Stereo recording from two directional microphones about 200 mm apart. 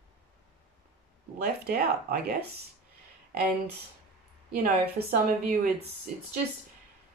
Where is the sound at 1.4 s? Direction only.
50° right (ahead or behind).